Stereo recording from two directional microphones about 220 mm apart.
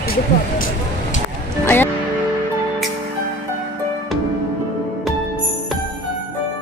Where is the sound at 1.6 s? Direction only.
10° left (ahead or behind).